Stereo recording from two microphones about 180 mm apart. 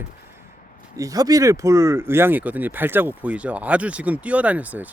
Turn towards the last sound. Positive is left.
turn(degrees=-10)  # may be behind; listen again after turning